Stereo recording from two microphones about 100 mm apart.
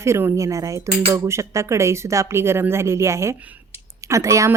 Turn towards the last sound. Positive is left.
turn(degrees=-30)  # may be behind; listen again after turning